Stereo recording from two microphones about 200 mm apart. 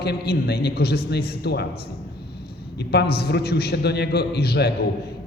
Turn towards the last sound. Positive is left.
turn(degrees=55)  # may be behind; listen again after turning